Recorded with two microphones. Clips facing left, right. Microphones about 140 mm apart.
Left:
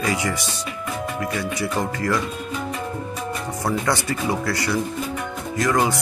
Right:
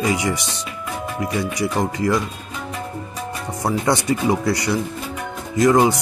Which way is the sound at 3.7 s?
20° right (ahead or behind).